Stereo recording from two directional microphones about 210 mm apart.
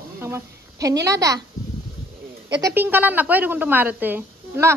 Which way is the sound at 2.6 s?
10° right (ahead or behind).